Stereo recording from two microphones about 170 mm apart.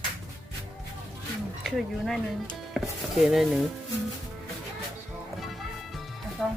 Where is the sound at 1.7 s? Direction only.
Centre (ahead or behind).